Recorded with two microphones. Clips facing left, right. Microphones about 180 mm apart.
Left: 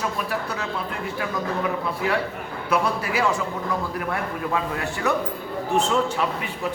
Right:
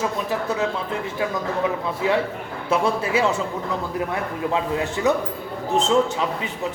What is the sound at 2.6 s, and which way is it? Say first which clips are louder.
Speech: right 2 dB; 25° right (ahead or behind).